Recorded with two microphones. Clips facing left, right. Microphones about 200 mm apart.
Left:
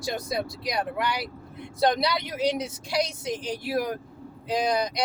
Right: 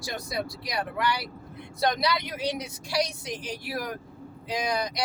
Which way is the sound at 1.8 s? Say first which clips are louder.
Left 3 dB; 25° left (ahead or behind).